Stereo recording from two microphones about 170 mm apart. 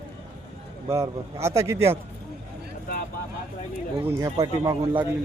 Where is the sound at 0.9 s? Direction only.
15° right (ahead or behind).